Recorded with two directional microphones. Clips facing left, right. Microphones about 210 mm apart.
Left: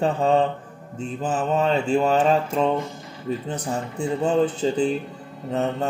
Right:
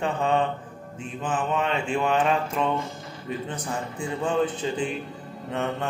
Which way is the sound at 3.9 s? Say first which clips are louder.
Left 5 dB; 40° left (ahead or behind).